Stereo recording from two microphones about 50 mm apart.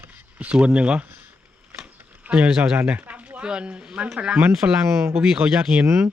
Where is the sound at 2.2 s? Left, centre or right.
Right.